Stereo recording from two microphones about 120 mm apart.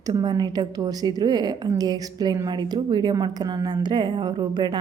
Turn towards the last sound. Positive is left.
turn(degrees=-40)  # may be behind; listen again after turning